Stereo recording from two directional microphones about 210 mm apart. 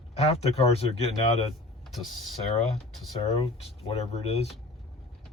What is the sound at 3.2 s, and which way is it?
Speech, 30° left (ahead or behind).